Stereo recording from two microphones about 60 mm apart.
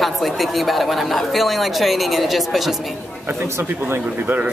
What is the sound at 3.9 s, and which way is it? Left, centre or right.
Speech, right.